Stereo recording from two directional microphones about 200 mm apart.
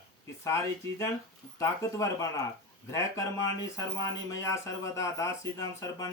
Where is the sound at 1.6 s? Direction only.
15° left (ahead or behind).